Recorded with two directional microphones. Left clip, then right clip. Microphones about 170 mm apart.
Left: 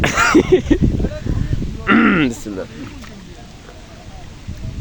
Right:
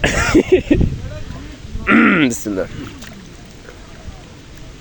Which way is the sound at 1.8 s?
5° right (ahead or behind).